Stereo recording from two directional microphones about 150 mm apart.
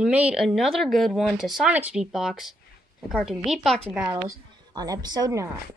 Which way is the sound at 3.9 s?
10° right (ahead or behind).